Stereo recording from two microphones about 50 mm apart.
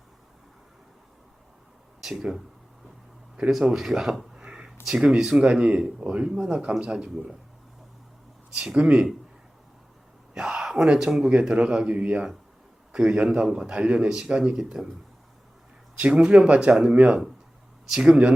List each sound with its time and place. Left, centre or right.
2.0 s speech: centre
3.8 s speech: centre
4.4 s a sound: centre
4.9 s speech: centre
8.6 s speech: centre
10.3 s a sound: centre
10.8 s speech: centre
11.3 s speech: right
12.9 s a man's voice: centre
14.5 s speech: centre
16.1 s speech: centre
17.9 s speech: centre